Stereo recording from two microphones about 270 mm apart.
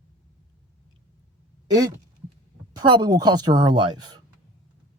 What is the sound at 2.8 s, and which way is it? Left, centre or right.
Speech, centre.